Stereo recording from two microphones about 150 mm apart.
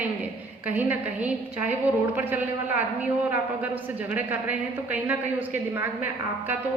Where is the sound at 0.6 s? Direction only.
10° right (ahead or behind).